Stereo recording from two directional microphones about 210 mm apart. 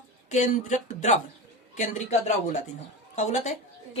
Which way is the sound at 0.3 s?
35° left (ahead or behind).